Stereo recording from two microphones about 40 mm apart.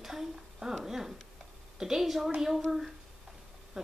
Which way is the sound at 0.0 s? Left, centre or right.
Centre.